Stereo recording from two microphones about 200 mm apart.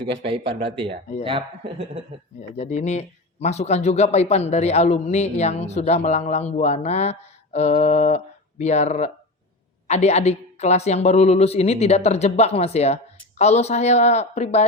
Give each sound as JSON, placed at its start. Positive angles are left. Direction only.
{"t": 0.3, "sound": "speech", "side_deg": -25}
{"t": 2.6, "sound": "speech", "side_deg": 35}